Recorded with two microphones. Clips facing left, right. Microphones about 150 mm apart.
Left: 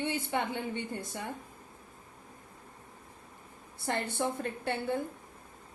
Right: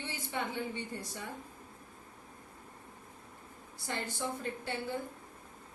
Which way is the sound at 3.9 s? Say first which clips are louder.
Left 5 dB; 60° left (ahead or behind).